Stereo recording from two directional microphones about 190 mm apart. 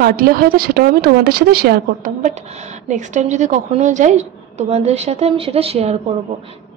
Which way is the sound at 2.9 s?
40° right (ahead or behind).